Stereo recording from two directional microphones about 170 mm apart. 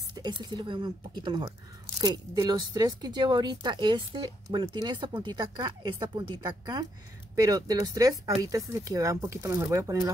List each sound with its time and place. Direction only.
0.1 s speech: 25° right (ahead or behind)